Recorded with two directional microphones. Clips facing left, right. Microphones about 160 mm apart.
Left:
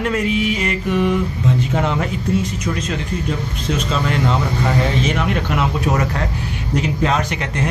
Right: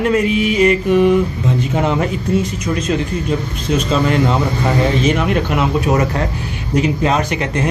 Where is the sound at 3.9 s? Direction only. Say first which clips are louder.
Right 5 dB; 5° right (ahead or behind).